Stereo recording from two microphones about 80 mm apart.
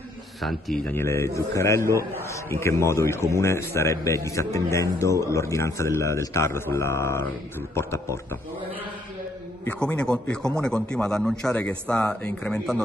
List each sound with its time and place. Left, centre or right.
0.4 s speech: centre
0.9 s a man's voice: left
9.8 s a man's voice: centre